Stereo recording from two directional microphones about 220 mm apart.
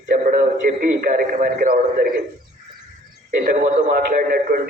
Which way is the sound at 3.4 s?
40° right (ahead or behind).